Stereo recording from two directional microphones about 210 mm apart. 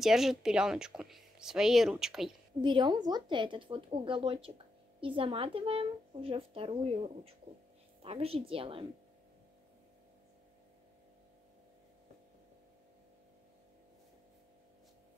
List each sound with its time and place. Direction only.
0.0 s speech: centre (ahead or behind)
2.6 s speech: 20° right (ahead or behind)